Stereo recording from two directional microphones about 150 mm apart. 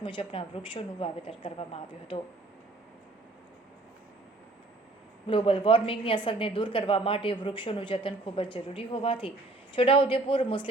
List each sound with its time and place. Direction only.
0.0 s a woman's voice: 35° left (ahead or behind)
5.3 s a woman's voice: 35° left (ahead or behind)